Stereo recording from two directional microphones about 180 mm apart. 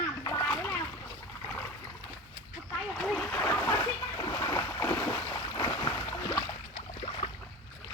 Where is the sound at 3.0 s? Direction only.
5° left (ahead or behind); by 6.4 s 20° left (ahead or behind).